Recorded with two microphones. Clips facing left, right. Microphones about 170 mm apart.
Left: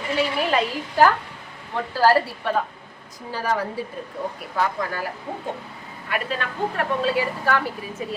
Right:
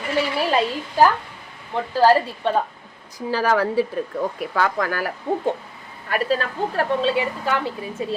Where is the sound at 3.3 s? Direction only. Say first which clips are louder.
Right 5 dB; 90° right.